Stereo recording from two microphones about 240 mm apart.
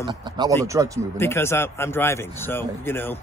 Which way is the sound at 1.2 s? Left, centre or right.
Centre.